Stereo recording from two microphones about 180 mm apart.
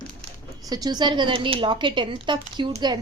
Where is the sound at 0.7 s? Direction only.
20° right (ahead or behind).